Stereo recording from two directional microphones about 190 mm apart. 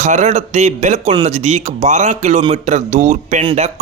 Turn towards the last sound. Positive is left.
turn(degrees=-35)  # may be behind; listen again after turning